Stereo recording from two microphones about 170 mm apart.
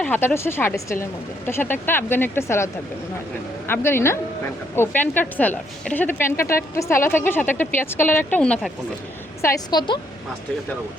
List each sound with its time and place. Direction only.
0.0 s speech: 10° left (ahead or behind)
3.7 s speech: 15° left (ahead or behind)
9.4 s a woman's voice: 20° left (ahead or behind)